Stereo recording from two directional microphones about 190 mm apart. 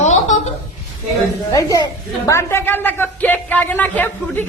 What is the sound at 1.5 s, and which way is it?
A woman's voice, 20° left (ahead or behind).